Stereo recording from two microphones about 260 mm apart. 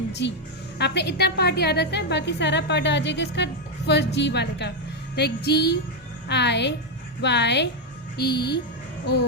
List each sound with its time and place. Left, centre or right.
0.1 s a woman's voice: left